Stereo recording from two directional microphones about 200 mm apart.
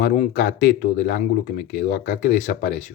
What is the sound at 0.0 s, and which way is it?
Speech, 45° left (ahead or behind).